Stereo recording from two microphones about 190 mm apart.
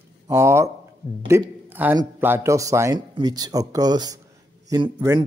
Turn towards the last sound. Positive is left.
turn(degrees=-15)  # may be behind; listen again after turning